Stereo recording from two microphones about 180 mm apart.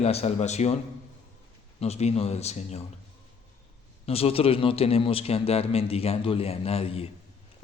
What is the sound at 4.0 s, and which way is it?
A man's voice, 35° left (ahead or behind).